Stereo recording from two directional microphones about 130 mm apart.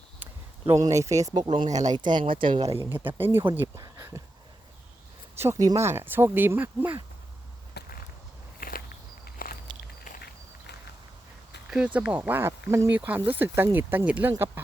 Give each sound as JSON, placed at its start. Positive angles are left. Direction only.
{"t": 0.7, "sound": "speech", "side_deg": -25}
{"t": 1.6, "sound": "speech", "side_deg": -65}
{"t": 2.0, "sound": "speech", "side_deg": -35}
{"t": 2.6, "sound": "speech", "side_deg": -15}
{"t": 5.4, "sound": "speech", "side_deg": -25}
{"t": 8.6, "sound": "walk", "side_deg": 90}
{"t": 11.9, "sound": "speech", "side_deg": -10}